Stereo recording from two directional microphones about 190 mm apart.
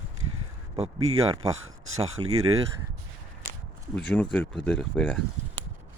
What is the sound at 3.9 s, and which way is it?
Speech, 5° left (ahead or behind).